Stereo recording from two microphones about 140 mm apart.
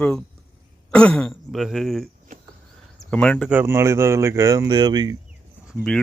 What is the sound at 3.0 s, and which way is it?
Speech, 5° left (ahead or behind).